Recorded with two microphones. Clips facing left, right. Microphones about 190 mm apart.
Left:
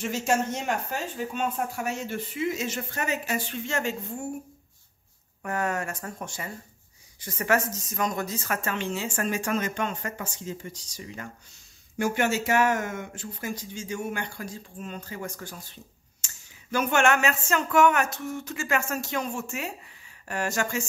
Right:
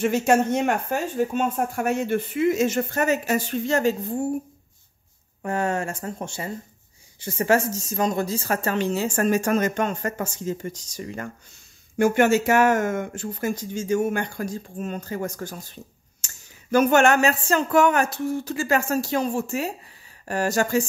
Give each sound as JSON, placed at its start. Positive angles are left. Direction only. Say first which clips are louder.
{"t": 0.0, "sound": "speech", "louder": "right 7 dB", "side_deg": -60}
{"t": 5.4, "sound": "speech", "louder": "right 4 dB", "side_deg": -30}